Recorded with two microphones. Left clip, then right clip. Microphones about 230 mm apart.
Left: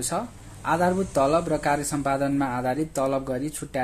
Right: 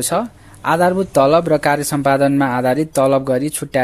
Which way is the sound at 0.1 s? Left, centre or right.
Right.